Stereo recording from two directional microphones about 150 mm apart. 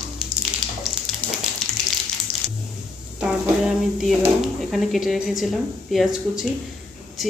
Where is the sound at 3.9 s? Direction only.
Centre (ahead or behind).